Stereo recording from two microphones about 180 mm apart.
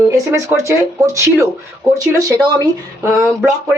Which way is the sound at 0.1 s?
20° right (ahead or behind).